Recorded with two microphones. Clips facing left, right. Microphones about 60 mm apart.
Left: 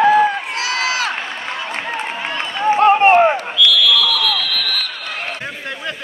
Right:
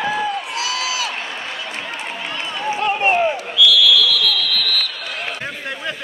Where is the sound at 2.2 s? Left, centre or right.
Left.